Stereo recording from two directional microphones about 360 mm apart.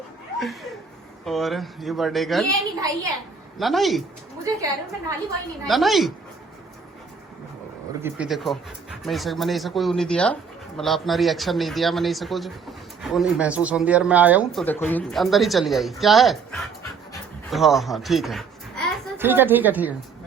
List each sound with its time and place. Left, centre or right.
1.2 s speech: centre
5.6 s speech: centre
8.0 s a woman's voice: centre